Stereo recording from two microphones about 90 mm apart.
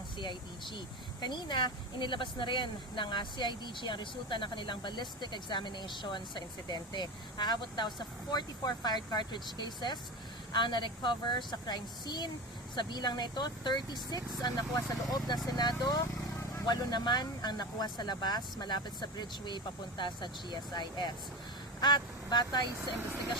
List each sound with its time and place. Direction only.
0.2 s speech: 60° left (ahead or behind)